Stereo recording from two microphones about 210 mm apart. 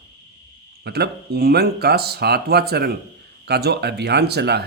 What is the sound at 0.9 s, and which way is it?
Speech, 50° right (ahead or behind).